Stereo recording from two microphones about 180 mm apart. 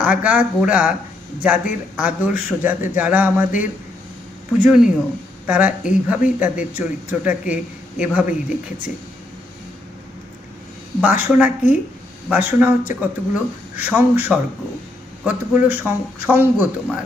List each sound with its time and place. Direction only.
0.0 s speech: 5° right (ahead or behind)
4.6 s speech: 5° right (ahead or behind)
11.0 s speech: 10° right (ahead or behind)